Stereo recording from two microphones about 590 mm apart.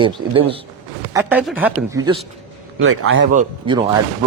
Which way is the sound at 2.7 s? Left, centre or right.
Centre.